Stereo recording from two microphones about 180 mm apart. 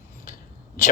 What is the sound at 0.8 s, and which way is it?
Speech, 45° left (ahead or behind).